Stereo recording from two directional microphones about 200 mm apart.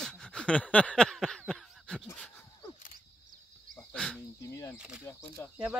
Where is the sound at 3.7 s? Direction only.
5° left (ahead or behind).